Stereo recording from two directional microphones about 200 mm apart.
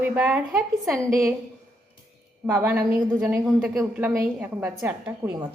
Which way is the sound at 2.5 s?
10° right (ahead or behind).